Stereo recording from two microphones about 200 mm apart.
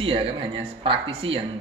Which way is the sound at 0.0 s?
25° right (ahead or behind).